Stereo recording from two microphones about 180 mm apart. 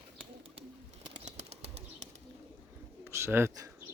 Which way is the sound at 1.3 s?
35° right (ahead or behind).